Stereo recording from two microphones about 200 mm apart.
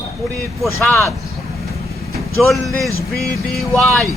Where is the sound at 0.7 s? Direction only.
15° left (ahead or behind).